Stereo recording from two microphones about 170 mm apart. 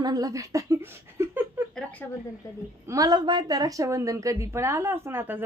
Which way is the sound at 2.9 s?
20° right (ahead or behind).